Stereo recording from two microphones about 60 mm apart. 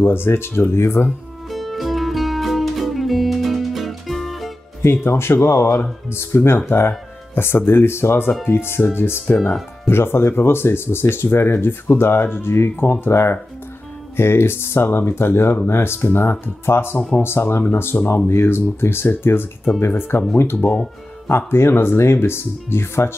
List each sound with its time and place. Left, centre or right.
0.0 s speech: left
1.5 s music: centre
4.8 s speech: left
21.4 s speech: left